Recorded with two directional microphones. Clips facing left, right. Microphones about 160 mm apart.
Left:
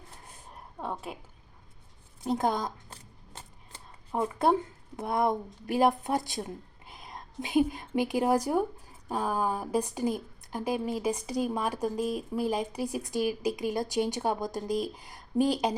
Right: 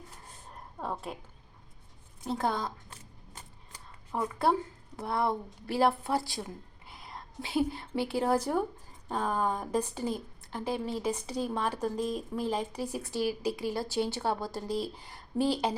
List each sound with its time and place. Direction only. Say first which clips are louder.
0.8 s a woman's voice: even; centre (ahead or behind)
2.2 s a woman's voice: left 3 dB; 15° left (ahead or behind)
3.3 s shuffling cards: left 3 dB; 25° left (ahead or behind)
4.9 s a woman's voice: left 3 dB; 15° left (ahead or behind)